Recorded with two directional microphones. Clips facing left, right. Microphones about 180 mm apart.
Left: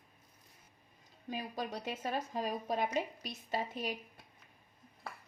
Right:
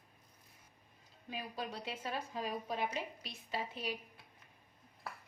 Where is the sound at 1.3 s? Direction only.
45° left (ahead or behind).